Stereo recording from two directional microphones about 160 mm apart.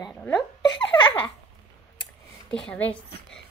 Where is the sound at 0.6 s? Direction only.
30° left (ahead or behind).